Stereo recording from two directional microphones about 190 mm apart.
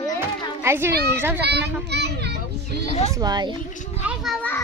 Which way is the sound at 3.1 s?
20° right (ahead or behind).